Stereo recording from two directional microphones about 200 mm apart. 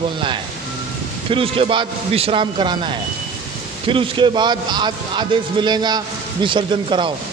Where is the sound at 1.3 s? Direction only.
25° right (ahead or behind).